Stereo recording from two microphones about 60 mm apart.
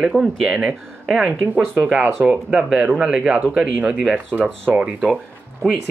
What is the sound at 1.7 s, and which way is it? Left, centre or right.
Speech, right.